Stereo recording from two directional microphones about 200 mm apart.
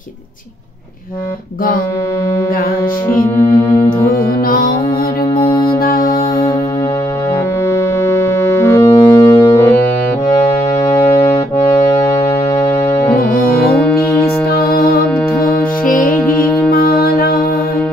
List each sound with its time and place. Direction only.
4.5 s music: 45° left (ahead or behind)
5.3 s music: 15° left (ahead or behind)
5.8 s music: 45° left (ahead or behind)
7.7 s music: 15° left (ahead or behind)
10.8 s music: 10° left (ahead or behind)
13.2 s music: 45° left (ahead or behind)